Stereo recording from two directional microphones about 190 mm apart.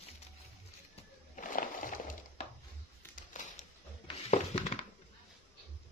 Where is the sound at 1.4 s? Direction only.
45° left (ahead or behind).